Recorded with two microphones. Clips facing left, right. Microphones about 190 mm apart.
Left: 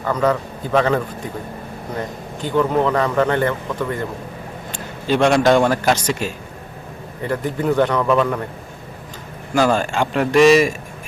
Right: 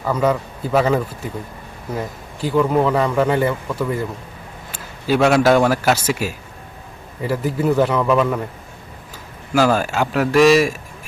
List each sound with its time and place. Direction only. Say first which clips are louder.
0.0 s a man's voice: even; 10° right (ahead or behind)
9.5 s speech: right 1 dB; 5° right (ahead or behind)